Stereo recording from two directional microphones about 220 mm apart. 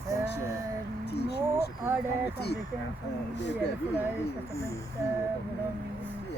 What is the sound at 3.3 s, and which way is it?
Speech, 50° left (ahead or behind).